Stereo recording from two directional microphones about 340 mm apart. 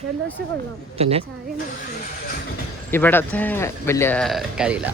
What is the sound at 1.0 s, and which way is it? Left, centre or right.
Speech, centre.